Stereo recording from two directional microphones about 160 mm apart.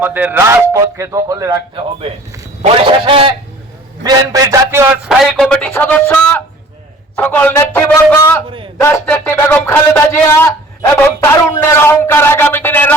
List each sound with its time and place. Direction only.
0.0 s speech: 10° right (ahead or behind)
2.6 s a man's voice: 35° right (ahead or behind); by 4.9 s 15° right (ahead or behind)
5.0 s a man's voice: centre (ahead or behind)
8.4 s a man's voice: 35° right (ahead or behind)
8.8 s a man's voice: 15° left (ahead or behind)
11.6 s a man's voice: 15° left (ahead or behind)